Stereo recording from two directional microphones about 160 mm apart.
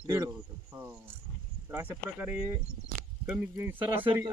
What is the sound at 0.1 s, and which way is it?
Cricket, 20° right (ahead or behind).